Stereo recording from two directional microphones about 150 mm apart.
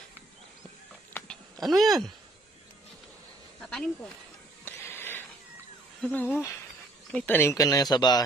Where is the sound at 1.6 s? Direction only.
Centre (ahead or behind).